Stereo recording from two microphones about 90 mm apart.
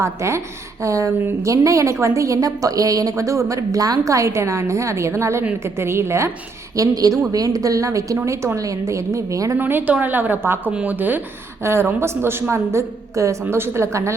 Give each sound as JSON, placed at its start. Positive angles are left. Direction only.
{"t": 0.0, "sound": "a woman's voice", "side_deg": -30}
{"t": 6.7, "sound": "a woman's voice", "side_deg": -40}
{"t": 9.6, "sound": "a woman's voice", "side_deg": -20}